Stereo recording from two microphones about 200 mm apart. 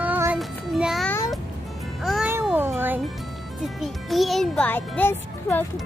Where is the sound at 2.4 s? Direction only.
10° right (ahead or behind).